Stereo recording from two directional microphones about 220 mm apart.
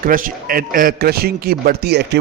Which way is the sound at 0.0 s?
40° right (ahead or behind).